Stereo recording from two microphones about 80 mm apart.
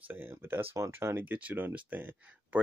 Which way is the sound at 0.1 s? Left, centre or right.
Right.